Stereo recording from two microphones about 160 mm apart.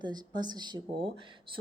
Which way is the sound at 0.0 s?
25° right (ahead or behind).